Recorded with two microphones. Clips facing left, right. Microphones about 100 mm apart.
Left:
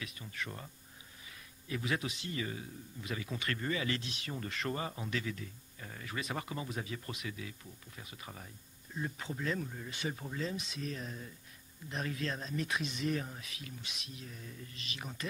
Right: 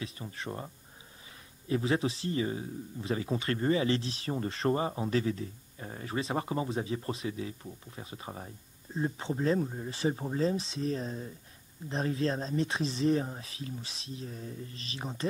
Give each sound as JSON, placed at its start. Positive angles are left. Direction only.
{"t": 0.0, "sound": "a man's voice", "side_deg": -30}
{"t": 1.7, "sound": "a man's voice", "side_deg": -30}